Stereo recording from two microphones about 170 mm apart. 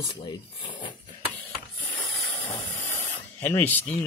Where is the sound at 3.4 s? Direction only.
10° left (ahead or behind).